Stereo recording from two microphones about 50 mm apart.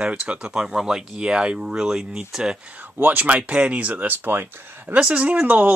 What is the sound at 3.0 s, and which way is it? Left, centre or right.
Speech, right.